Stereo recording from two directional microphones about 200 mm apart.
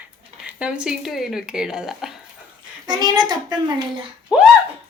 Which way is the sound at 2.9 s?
20° right (ahead or behind).